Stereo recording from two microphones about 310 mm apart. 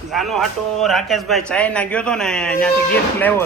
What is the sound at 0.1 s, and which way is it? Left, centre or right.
A man's voice, centre.